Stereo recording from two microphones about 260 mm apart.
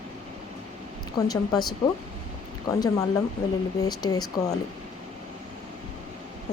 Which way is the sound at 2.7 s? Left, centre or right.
Centre.